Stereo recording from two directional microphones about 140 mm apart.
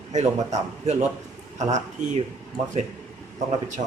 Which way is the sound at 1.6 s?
55° right (ahead or behind).